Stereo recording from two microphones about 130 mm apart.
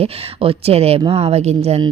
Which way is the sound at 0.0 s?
50° right (ahead or behind).